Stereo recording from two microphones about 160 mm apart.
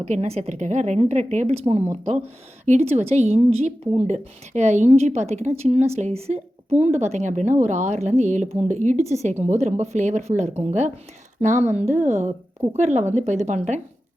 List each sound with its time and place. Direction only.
0.0 s speech: 45° right (ahead or behind)